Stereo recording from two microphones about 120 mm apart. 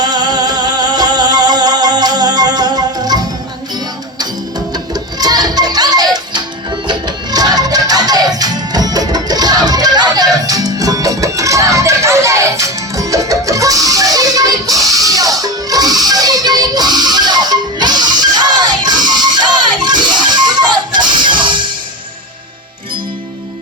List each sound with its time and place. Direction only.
0.0 s music: 35° right (ahead or behind)
4.7 s music: 35° right (ahead or behind)